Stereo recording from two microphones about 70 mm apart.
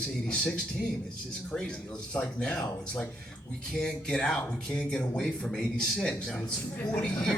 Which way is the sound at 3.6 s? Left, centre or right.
Centre.